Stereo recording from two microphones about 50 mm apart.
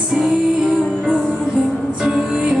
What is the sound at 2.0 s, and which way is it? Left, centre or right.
Music, centre.